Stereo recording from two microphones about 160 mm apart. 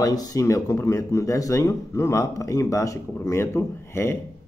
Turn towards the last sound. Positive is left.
turn(degrees=15)  # may be behind; listen again after turning